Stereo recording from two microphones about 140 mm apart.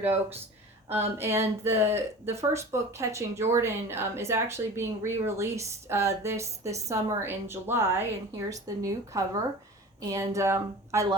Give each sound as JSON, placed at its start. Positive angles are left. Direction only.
{"t": 0.9, "sound": "speech", "side_deg": -15}